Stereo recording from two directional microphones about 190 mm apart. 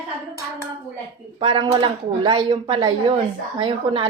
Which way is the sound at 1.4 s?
25° right (ahead or behind).